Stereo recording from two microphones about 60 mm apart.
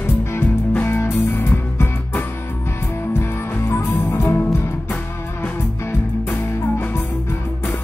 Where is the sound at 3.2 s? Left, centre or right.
Left.